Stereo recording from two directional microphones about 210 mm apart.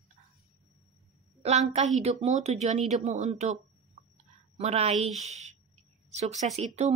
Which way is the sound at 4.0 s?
35° right (ahead or behind).